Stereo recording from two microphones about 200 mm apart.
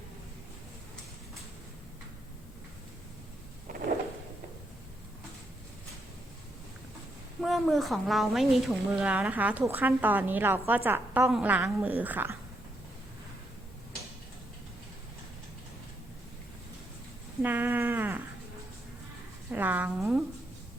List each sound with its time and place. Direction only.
3.7 s a sound: 40° right (ahead or behind)
7.4 s a woman's voice: centre (ahead or behind)
17.4 s speech: 10° right (ahead or behind)
19.5 s a woman's voice: 10° right (ahead or behind)